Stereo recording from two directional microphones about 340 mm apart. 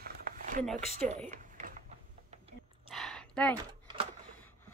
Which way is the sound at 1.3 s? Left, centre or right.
Right.